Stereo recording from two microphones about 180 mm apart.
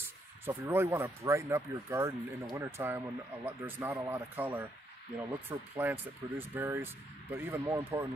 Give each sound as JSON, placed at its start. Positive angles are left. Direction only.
{"t": 0.5, "sound": "speech", "side_deg": -10}